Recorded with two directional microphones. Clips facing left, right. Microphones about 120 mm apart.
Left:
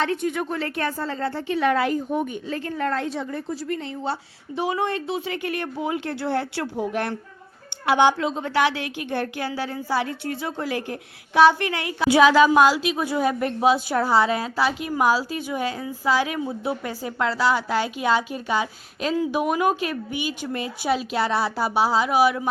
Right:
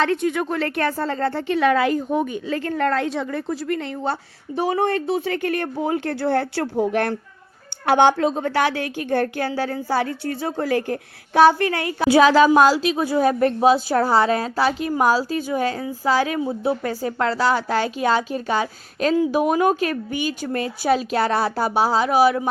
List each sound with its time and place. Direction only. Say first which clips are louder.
0.0 s a woman's voice: right 4 dB; 85° right; by 22.4 s 35° right (ahead or behind)